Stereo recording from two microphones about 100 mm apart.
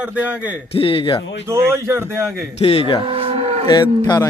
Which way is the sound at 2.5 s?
85° left.